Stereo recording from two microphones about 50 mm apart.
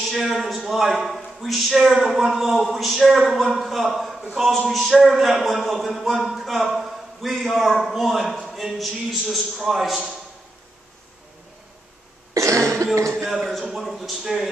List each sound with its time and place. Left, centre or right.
0.0 s a man's voice: centre
12.4 s cough: right
13.5 s a man's voice: centre